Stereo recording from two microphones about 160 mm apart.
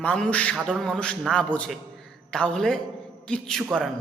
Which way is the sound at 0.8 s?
5° left (ahead or behind).